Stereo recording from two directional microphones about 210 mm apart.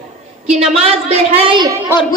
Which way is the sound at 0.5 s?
30° right (ahead or behind).